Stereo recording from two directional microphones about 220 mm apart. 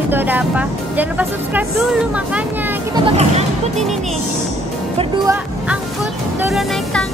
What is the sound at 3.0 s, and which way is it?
Speech, 30° right (ahead or behind).